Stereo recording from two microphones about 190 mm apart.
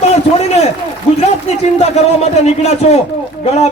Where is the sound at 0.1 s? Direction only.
35° left (ahead or behind).